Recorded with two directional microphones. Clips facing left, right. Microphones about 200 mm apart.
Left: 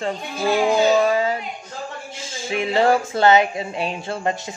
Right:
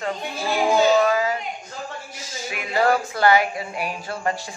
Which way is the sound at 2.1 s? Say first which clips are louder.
Left 7 dB; 25° left (ahead or behind).